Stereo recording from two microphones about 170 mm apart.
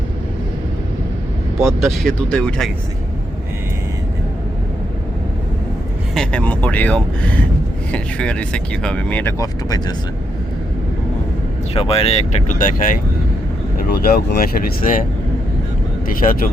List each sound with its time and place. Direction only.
1.8 s speech: centre (ahead or behind)
6.1 s speech: 10° left (ahead or behind)
9.4 s speech: 20° left (ahead or behind)
11.7 s speech: 35° left (ahead or behind); by 15.0 s 55° left (ahead or behind)
16.0 s speech: 55° left (ahead or behind)